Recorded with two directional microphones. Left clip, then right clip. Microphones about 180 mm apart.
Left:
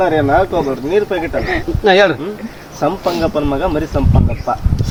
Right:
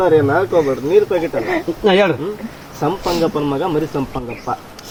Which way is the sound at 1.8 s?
15° left (ahead or behind).